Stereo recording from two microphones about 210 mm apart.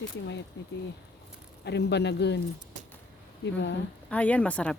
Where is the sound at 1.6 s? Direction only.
55° left (ahead or behind).